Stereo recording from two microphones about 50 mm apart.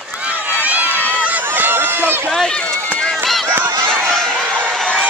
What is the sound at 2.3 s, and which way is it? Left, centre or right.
Run, centre.